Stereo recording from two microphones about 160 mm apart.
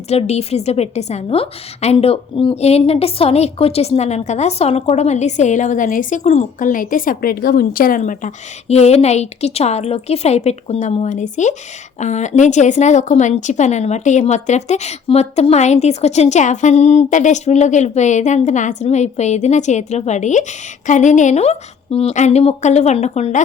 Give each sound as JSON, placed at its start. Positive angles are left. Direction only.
{"t": 0.1, "sound": "a woman's voice", "side_deg": 40}